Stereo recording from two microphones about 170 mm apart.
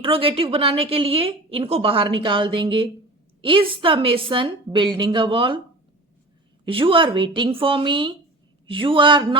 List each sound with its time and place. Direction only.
0.0 s a woman's voice: 35° right (ahead or behind)
6.7 s a woman's voice: 30° right (ahead or behind)